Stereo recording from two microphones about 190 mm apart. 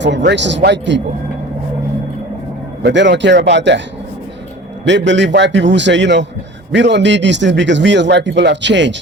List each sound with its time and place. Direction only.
0.0 s speech: 70° right (ahead or behind)
2.8 s speech: 65° right (ahead or behind)
4.9 s speech: 70° right (ahead or behind)